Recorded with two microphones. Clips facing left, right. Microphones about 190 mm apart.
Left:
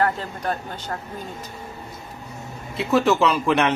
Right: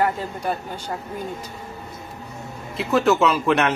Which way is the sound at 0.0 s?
10° right (ahead or behind).